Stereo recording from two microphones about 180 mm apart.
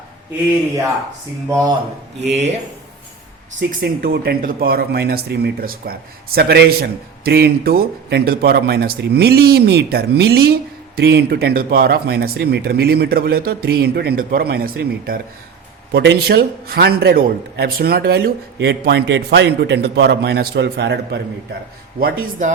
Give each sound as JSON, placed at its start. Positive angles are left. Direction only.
{"t": 1.5, "sound": "speech", "side_deg": -25}
{"t": 2.3, "sound": "speech", "side_deg": -40}
{"t": 3.8, "sound": "a man's voice", "side_deg": -55}
{"t": 22.2, "sound": "speech", "side_deg": -45}